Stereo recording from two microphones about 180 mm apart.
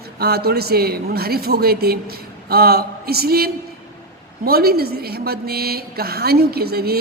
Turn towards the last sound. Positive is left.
turn(degrees=-60)  # may be behind; listen again after turning